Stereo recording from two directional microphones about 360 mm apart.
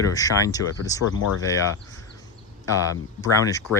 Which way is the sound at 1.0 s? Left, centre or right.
Left.